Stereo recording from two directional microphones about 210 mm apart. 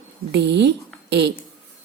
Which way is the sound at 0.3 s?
55° right (ahead or behind).